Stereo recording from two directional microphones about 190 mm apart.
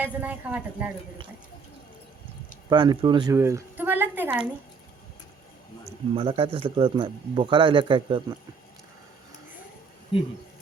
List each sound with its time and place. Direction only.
0.0 s a woman's voice: 10° right (ahead or behind)
2.6 s a woman's voice: 20° right (ahead or behind)
5.8 s a man's voice: 30° right (ahead or behind)